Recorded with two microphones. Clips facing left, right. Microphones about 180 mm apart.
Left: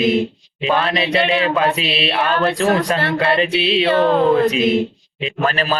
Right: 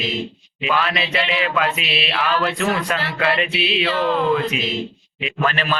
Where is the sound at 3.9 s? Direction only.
55° left (ahead or behind).